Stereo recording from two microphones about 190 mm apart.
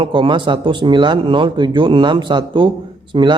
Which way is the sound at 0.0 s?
25° right (ahead or behind).